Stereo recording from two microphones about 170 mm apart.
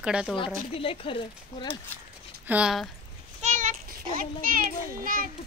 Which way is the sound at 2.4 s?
5° right (ahead or behind).